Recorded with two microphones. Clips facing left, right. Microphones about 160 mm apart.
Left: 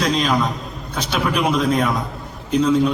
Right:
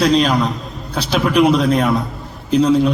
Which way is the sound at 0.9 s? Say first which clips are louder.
Right 4 dB; 35° right (ahead or behind).